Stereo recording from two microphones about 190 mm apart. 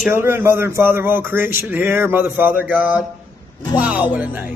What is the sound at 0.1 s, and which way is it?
Speech, 15° right (ahead or behind).